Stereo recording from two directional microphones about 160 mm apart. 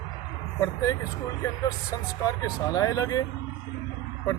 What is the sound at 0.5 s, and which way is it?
Speech, 20° left (ahead or behind).